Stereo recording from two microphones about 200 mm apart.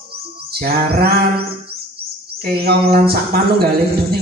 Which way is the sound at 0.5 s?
50° right (ahead or behind).